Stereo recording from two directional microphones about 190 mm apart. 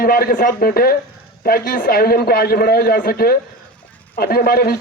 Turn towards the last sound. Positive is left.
turn(degrees=55)  # may be behind; listen again after turning